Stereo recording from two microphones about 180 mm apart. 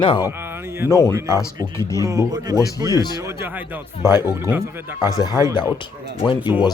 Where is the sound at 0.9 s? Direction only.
15° left (ahead or behind).